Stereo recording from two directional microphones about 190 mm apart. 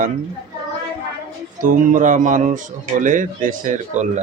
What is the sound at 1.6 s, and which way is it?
A man's voice, 45° right (ahead or behind).